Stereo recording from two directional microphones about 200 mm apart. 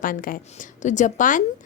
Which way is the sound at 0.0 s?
45° left (ahead or behind).